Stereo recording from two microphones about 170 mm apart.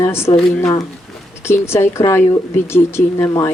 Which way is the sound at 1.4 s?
15° left (ahead or behind).